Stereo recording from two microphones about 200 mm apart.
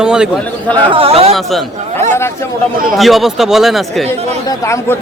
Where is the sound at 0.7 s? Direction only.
25° right (ahead or behind).